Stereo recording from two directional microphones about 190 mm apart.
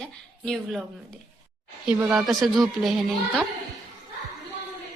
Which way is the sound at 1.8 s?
5° right (ahead or behind).